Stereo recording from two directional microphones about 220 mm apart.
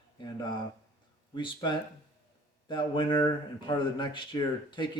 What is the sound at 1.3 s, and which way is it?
Speech, 20° left (ahead or behind).